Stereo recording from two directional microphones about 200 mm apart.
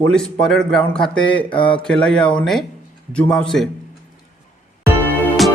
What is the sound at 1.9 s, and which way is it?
Speech, 5° left (ahead or behind).